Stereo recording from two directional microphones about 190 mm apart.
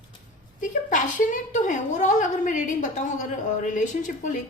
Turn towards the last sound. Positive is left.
turn(degrees=40)  # may be behind; listen again after turning